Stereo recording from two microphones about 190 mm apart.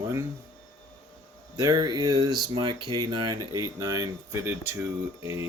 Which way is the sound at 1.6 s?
20° right (ahead or behind).